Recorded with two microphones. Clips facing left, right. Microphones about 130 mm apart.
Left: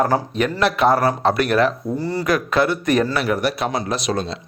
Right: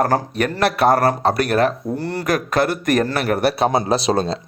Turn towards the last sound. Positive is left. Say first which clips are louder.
# right 5 dB
turn(degrees=-30)  # may be behind; listen again after turning